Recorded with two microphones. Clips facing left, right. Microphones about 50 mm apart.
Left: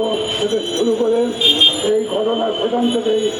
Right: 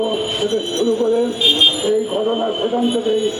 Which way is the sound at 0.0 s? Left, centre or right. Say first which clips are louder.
Left 1 dB; centre.